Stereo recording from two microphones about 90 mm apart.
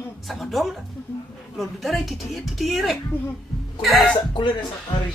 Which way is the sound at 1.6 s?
Centre (ahead or behind).